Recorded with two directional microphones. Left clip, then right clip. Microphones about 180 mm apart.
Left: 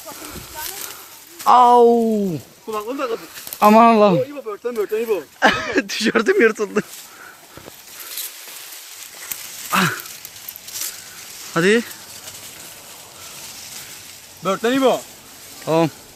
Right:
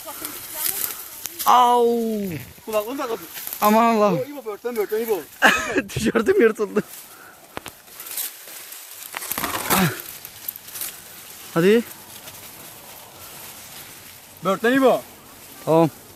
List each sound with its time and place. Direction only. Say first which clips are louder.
1.5 s speech: left 3 dB; 25° left (ahead or behind)
1.7 s speech: left 6 dB; 40° left (ahead or behind)
2.6 s speech: even; 25° right (ahead or behind)
3.6 s speech: left 6 dB; 30° left (ahead or behind)
4.4 s speech: left 2 dB; 30° right (ahead or behind)
5.4 s speech: even; 20° left (ahead or behind); by 6.8 s 5° left (ahead or behind)
9.7 s a sound: left 5 dB; 5° right (ahead or behind)
11.5 s speech: left 1 dB; centre (ahead or behind)
14.4 s speech: even; 5° right (ahead or behind)